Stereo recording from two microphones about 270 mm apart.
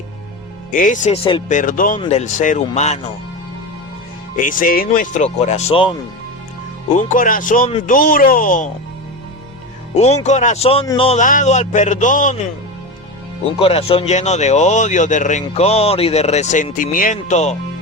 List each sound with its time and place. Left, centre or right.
0.7 s speech: left
4.4 s speech: left
9.9 s speech: left
13.4 s speech: left